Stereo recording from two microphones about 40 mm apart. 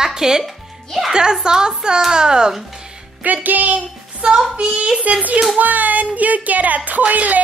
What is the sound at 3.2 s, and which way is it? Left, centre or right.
Speech, right.